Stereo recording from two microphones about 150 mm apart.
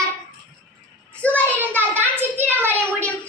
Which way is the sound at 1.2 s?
10° left (ahead or behind).